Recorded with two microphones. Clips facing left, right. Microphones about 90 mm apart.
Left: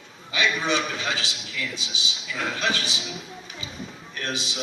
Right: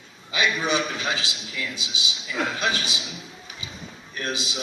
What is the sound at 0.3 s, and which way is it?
A man's voice, 20° right (ahead or behind).